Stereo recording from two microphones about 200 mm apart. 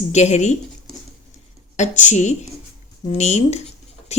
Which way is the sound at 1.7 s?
35° left (ahead or behind).